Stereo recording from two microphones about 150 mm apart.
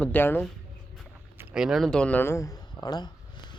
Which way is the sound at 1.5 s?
5° right (ahead or behind).